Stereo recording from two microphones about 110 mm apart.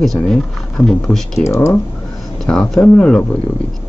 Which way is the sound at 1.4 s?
25° left (ahead or behind).